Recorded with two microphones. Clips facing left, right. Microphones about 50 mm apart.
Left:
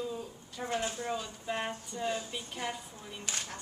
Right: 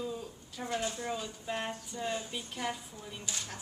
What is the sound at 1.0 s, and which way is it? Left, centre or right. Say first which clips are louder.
Speech: left 1 dB; centre.